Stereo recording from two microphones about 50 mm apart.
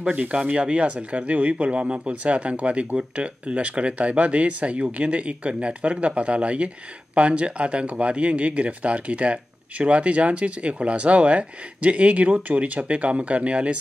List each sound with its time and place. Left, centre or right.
0.0 s speech: right